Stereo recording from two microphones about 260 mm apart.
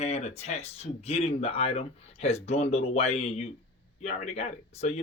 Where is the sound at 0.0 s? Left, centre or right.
Left.